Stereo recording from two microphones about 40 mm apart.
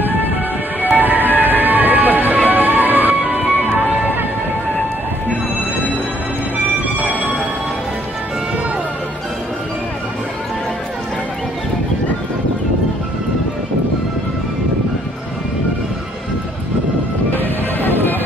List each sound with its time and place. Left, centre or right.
0.8 s music: right
7.0 s music: right
17.8 s music: left